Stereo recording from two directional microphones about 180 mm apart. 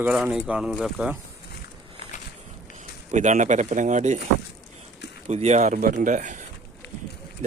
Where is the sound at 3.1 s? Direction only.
40° right (ahead or behind).